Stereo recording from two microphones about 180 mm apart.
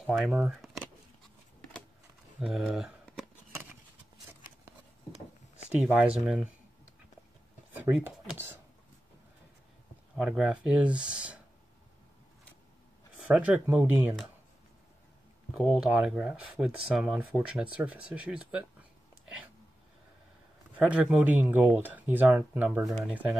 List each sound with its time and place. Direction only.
0.0 s speech: centre (ahead or behind)
2.4 s speech: centre (ahead or behind)
5.7 s speech: 5° right (ahead or behind)
7.7 s a sound: 10° right (ahead or behind)
10.1 s speech: 5° right (ahead or behind)
13.3 s speech: 5° right (ahead or behind)
15.5 s speech: centre (ahead or behind)
20.9 s speech: 5° right (ahead or behind)